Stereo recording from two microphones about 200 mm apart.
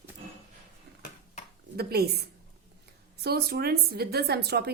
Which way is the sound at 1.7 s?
50° right (ahead or behind).